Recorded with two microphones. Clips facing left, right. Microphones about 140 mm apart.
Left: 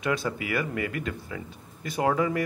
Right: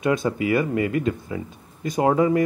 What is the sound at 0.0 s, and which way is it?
Speech, 20° right (ahead or behind).